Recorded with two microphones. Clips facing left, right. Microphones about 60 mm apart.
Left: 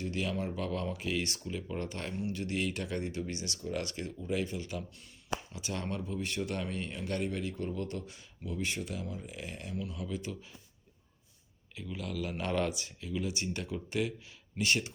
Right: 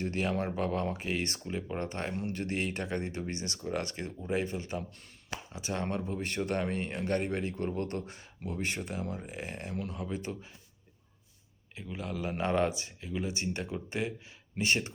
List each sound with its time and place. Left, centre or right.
0.0 s speech: right
2.1 s speech: right
11.7 s speech: right